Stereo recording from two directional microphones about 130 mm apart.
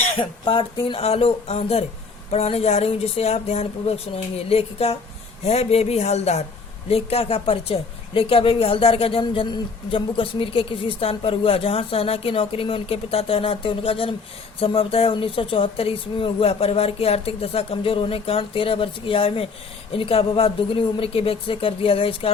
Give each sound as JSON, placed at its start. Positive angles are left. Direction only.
{"t": 0.2, "sound": "a woman's voice", "side_deg": 40}